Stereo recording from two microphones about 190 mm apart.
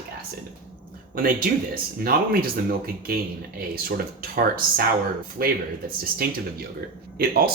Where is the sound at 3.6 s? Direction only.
50° right (ahead or behind).